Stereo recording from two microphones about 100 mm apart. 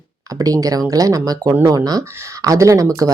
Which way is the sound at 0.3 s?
35° right (ahead or behind).